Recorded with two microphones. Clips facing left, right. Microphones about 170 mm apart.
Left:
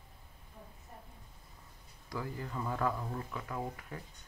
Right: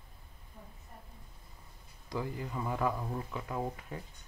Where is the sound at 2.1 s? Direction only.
20° right (ahead or behind).